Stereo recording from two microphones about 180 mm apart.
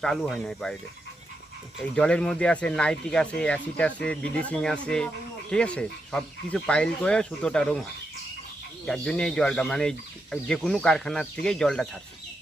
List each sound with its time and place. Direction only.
0.0 s speech: centre (ahead or behind)
1.8 s speech: 5° left (ahead or behind)
8.9 s speech: 5° left (ahead or behind)